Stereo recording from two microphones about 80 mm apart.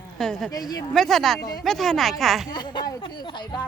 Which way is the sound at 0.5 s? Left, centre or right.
Left.